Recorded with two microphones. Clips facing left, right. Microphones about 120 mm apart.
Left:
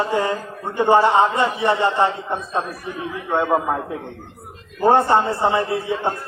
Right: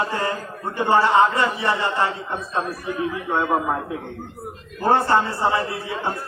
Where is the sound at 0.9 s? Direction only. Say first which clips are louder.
Left 2 dB; 20° left (ahead or behind).